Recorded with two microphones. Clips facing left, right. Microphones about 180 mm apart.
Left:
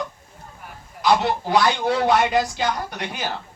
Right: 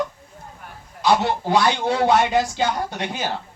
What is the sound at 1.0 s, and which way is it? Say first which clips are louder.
Speech: even; 20° right (ahead or behind).